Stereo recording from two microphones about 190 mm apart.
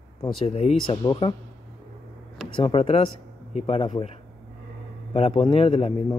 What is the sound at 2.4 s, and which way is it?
A man's voice, 25° left (ahead or behind).